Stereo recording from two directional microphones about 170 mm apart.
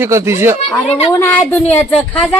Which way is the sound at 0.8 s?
40° left (ahead or behind).